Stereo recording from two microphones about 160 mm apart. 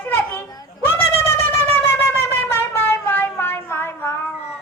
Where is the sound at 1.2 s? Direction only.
15° left (ahead or behind).